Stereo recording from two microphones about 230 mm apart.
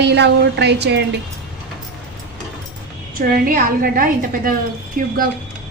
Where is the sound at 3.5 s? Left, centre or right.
Right.